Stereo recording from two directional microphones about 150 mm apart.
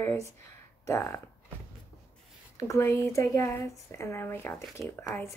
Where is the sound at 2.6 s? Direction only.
20° left (ahead or behind).